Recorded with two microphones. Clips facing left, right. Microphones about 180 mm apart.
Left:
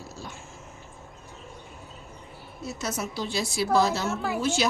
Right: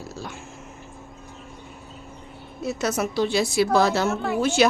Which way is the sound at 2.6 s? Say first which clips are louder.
Right 7 dB; 70° right (ahead or behind).